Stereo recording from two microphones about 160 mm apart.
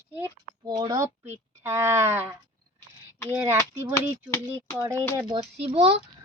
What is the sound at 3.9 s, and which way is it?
Speech, 15° left (ahead or behind).